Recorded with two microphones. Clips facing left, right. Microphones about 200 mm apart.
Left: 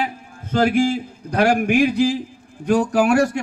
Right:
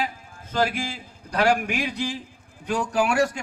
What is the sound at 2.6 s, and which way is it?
Speech, 65° left (ahead or behind).